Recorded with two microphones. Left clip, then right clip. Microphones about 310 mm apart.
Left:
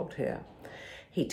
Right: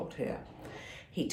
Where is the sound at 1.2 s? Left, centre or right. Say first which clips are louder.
Left 3 dB; left.